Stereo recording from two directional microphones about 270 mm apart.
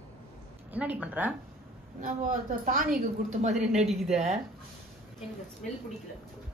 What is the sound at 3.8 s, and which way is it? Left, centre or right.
Speech, centre.